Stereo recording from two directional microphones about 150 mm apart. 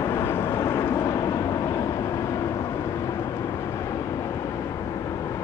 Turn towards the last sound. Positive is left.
turn(degrees=20)  # may be behind; listen again after turning